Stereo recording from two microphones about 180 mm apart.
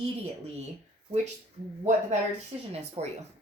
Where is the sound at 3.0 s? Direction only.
35° right (ahead or behind).